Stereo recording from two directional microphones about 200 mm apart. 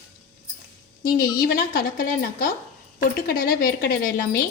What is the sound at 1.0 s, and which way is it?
A woman's voice, 50° left (ahead or behind).